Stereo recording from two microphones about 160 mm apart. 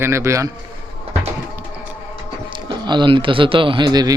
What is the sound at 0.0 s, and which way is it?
Speech, 20° right (ahead or behind).